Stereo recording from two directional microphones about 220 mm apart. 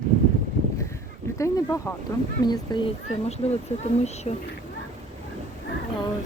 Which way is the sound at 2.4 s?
20° left (ahead or behind).